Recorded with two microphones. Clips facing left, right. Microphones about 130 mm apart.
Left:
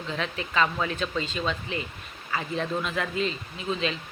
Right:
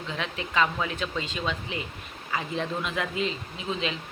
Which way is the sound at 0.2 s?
15° right (ahead or behind).